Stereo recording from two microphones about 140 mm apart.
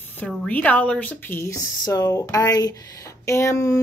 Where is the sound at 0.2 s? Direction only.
5° left (ahead or behind).